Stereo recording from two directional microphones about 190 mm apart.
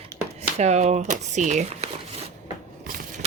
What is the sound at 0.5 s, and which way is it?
Speech, 35° right (ahead or behind).